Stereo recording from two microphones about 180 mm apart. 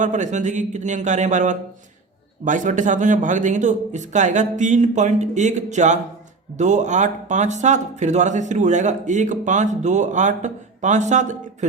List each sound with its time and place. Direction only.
0.0 s a man's voice: 40° right (ahead or behind)